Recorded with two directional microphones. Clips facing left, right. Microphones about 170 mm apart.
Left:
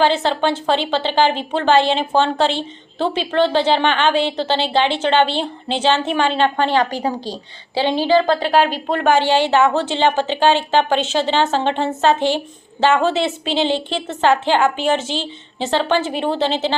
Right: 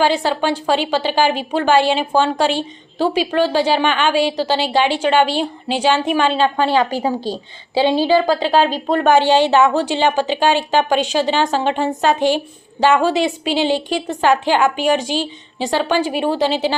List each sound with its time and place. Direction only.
0.1 s a woman's voice: 10° right (ahead or behind)
6.1 s a woman's voice: 20° left (ahead or behind)
7.8 s a woman's voice: 10° right (ahead or behind)